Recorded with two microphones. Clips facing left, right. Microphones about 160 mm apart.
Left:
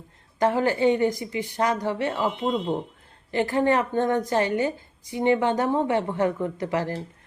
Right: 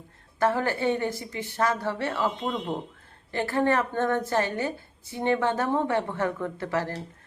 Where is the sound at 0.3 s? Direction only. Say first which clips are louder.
Left 3 dB; 15° left (ahead or behind).